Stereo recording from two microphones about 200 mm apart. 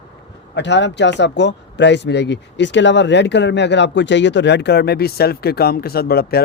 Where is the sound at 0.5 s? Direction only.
60° left (ahead or behind).